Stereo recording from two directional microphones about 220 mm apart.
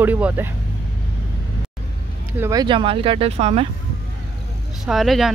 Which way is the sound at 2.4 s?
15° right (ahead or behind).